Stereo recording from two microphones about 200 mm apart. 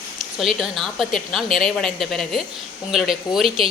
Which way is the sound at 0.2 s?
Centre (ahead or behind).